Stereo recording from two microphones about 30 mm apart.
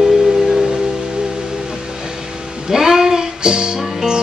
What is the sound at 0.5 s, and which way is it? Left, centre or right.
Music, right.